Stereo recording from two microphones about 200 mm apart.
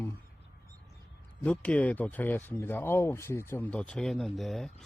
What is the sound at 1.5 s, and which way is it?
Speech, 5° left (ahead or behind).